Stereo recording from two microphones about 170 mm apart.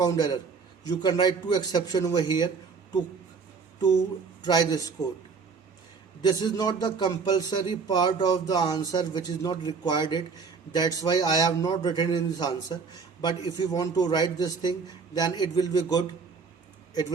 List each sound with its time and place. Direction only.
0.0 s a man's voice: 25° left (ahead or behind)
4.4 s a man's voice: 25° left (ahead or behind)
6.2 s a man's voice: 25° left (ahead or behind)